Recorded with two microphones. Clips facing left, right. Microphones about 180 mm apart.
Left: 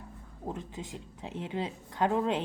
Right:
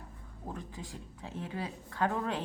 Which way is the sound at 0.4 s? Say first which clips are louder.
Left 4 dB; 20° left (ahead or behind).